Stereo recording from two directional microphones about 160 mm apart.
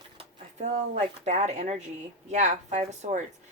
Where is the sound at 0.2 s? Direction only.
45° right (ahead or behind).